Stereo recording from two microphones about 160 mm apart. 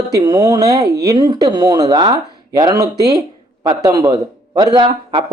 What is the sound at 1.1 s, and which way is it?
Speech, 25° right (ahead or behind).